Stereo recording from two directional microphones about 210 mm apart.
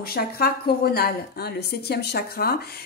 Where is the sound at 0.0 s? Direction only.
45° left (ahead or behind).